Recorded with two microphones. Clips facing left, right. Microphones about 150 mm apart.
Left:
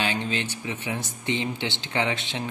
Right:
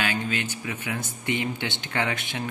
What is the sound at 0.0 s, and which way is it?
Speech, 25° left (ahead or behind).